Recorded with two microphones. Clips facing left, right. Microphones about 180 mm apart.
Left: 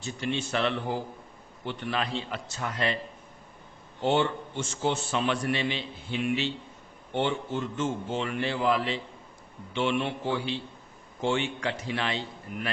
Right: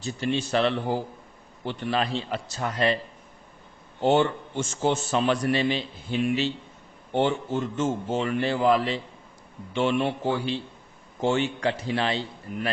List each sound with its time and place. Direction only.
0.0 s a man's voice: 35° right (ahead or behind)
4.0 s a man's voice: 45° right (ahead or behind)